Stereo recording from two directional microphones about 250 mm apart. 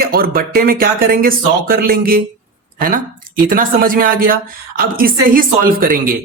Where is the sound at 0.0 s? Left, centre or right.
Right.